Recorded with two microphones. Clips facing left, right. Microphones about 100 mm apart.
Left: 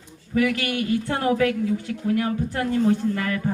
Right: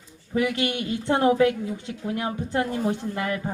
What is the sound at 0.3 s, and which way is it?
A woman's voice, 25° right (ahead or behind).